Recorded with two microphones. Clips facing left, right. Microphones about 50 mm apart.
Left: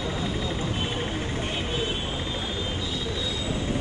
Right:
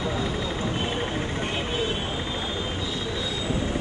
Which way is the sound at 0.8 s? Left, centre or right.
Right.